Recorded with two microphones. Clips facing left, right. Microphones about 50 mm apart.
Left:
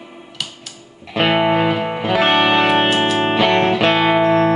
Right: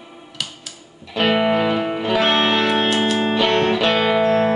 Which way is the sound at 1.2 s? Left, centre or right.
Centre.